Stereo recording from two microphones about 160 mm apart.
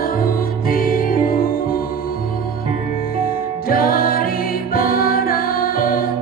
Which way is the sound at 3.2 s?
65° left (ahead or behind).